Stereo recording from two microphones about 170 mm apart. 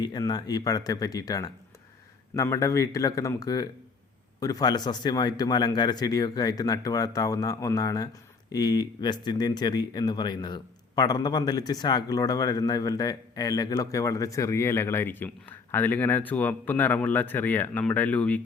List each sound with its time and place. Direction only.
0.0 s speech: 25° left (ahead or behind); by 18.3 s 10° left (ahead or behind)